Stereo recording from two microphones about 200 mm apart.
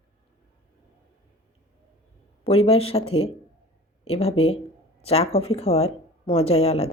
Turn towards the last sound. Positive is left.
turn(degrees=30)  # may be behind; listen again after turning